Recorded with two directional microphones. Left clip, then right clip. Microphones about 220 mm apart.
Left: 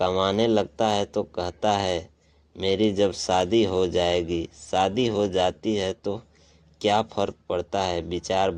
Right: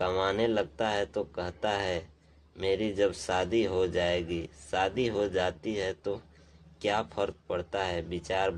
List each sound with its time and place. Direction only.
0.0 s speech: 30° left (ahead or behind)